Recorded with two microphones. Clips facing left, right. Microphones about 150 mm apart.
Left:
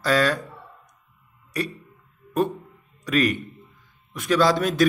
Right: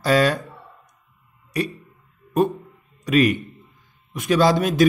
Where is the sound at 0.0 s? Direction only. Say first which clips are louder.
Right 3 dB; 20° right (ahead or behind).